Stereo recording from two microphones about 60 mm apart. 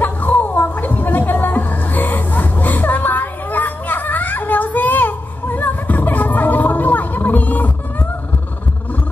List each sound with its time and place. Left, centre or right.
0.0 s music: left